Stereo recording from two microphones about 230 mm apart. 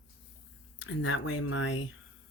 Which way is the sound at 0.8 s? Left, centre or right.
Left.